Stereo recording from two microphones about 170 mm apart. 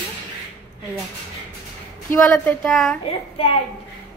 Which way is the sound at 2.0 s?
10° left (ahead or behind).